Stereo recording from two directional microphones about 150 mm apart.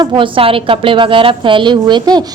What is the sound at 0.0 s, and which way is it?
A woman's voice, 35° right (ahead or behind).